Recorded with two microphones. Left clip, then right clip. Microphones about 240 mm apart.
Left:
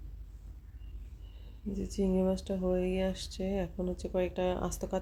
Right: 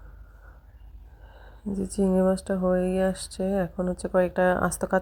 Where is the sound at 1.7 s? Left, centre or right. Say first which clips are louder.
Right 7 dB; right.